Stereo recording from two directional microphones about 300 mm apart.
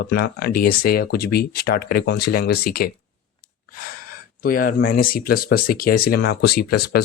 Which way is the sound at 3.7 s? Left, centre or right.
Left.